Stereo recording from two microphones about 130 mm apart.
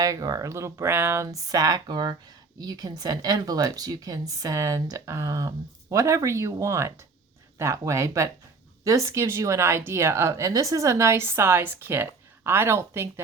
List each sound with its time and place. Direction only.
0.0 s speech: 30° right (ahead or behind)